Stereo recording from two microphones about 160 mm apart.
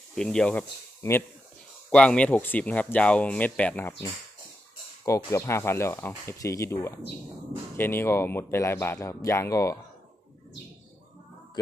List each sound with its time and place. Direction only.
0.2 s speech: 5° left (ahead or behind)
1.9 s speech: 5° left (ahead or behind)
5.0 s speech: 20° left (ahead or behind)